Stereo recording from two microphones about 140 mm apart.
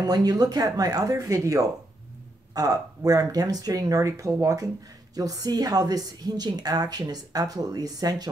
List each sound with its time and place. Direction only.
0.0 s a woman's voice: 25° right (ahead or behind)